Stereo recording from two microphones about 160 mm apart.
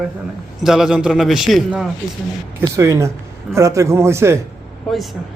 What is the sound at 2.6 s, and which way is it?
A man's voice, 20° right (ahead or behind).